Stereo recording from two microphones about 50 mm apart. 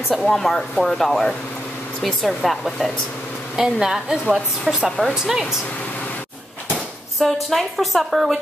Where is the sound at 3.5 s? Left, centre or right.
Centre.